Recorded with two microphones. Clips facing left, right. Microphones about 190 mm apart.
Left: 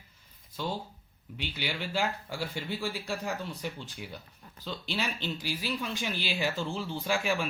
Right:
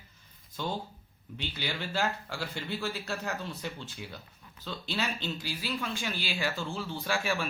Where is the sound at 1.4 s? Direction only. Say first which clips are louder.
Left 1 dB; 10° left (ahead or behind).